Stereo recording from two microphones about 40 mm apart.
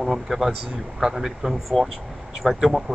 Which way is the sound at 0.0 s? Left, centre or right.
Centre.